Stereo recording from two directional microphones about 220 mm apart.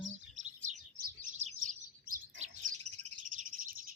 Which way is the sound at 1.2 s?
35° right (ahead or behind).